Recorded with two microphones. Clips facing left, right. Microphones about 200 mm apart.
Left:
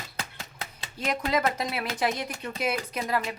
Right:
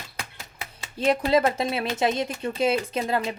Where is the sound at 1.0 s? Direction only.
30° right (ahead or behind).